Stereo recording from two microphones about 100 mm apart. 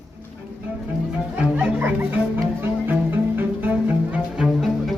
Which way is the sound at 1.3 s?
15° right (ahead or behind).